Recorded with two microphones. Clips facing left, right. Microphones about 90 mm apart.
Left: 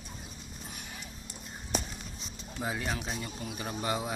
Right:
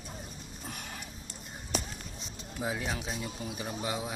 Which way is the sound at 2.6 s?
Centre (ahead or behind).